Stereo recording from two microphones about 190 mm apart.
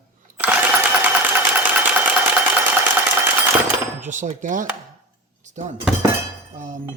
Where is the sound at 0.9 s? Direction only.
10° right (ahead or behind).